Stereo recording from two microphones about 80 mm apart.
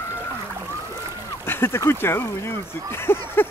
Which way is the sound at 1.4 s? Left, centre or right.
Left.